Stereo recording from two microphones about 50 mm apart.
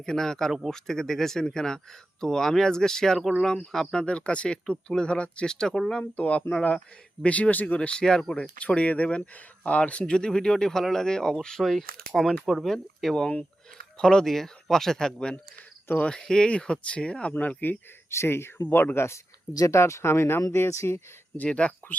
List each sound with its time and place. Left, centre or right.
0.0 s speech: centre
4.0 s speech: left
5.9 s speech: left
7.8 s speech: centre
8.5 s speech: left
17.3 s speech: left
18.1 s speech: left
20.7 s speech: left
21.3 s speech: left